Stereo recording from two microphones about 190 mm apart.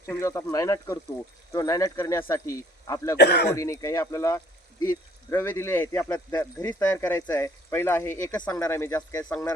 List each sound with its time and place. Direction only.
0.0 s speech: 15° left (ahead or behind)
3.2 s speech: 60° left (ahead or behind)
3.5 s speech: 15° left (ahead or behind)